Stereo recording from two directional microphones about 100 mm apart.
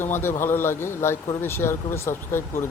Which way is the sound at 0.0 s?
25° left (ahead or behind).